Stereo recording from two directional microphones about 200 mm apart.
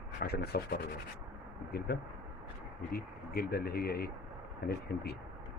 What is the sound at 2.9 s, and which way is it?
Speech, 50° left (ahead or behind).